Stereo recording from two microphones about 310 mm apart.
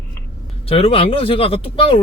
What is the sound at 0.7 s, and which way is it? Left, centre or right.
Speech, centre.